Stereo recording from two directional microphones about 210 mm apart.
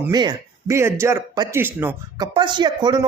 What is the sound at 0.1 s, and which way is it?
Speech, 20° right (ahead or behind).